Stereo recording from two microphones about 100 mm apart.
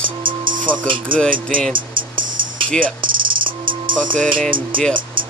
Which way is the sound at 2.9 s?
55° right (ahead or behind).